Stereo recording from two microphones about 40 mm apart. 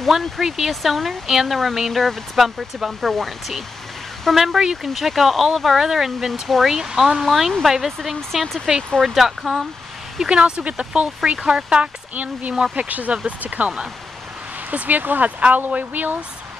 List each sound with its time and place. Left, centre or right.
0.0 s speech: centre
7.2 s speech: centre
8.7 s speech: centre
9.0 s speech: centre
10.3 s speech: right
12.7 s speech: right
14.7 s speech: right